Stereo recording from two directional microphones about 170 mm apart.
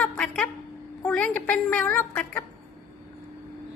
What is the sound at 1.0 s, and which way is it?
A woman's voice, 5° left (ahead or behind).